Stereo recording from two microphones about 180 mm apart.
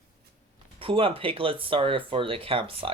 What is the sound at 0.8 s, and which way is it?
Speech, 30° right (ahead or behind).